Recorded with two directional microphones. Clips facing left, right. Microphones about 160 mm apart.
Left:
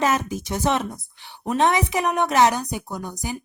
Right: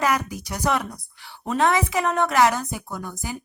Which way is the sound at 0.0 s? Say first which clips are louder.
Left 1 dB; 25° left (ahead or behind).